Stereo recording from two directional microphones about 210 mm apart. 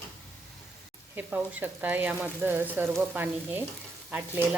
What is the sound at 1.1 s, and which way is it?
Speech, 10° right (ahead or behind).